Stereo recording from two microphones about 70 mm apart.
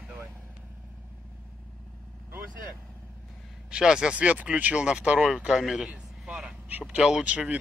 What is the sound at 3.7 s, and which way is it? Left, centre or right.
Speech, centre.